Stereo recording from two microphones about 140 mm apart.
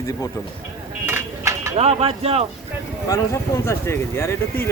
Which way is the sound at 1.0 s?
20° right (ahead or behind).